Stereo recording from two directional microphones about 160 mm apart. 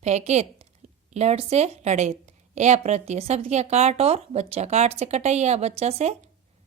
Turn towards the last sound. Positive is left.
turn(degrees=-40)  # may be behind; listen again after turning